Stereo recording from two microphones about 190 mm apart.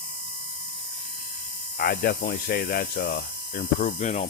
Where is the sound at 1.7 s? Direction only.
55° left (ahead or behind).